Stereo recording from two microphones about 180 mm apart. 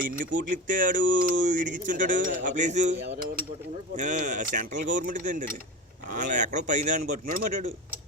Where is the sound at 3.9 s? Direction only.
45° right (ahead or behind).